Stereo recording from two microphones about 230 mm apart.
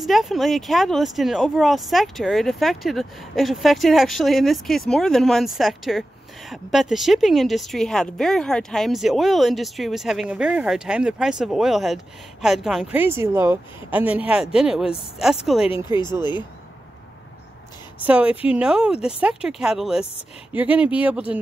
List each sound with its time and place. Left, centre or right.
0.0 s a woman's voice: centre
15.7 s speech: centre
18.0 s a woman's voice: centre